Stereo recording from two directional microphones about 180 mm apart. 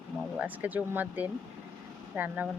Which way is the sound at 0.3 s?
10° right (ahead or behind).